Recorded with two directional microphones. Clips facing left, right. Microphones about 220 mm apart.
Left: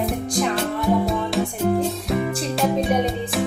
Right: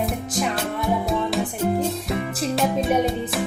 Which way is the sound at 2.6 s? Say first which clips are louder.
Even; centre (ahead or behind).